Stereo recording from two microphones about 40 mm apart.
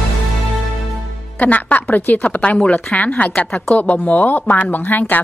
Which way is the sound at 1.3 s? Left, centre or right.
Left.